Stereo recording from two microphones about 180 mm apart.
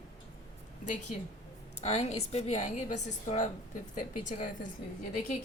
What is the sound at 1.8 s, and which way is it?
A woman's voice, 35° left (ahead or behind).